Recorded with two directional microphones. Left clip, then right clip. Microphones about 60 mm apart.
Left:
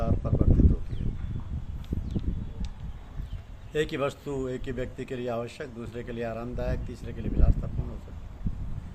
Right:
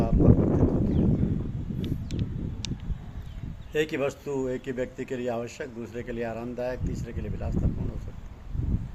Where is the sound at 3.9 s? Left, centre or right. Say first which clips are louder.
Right 2 dB; left.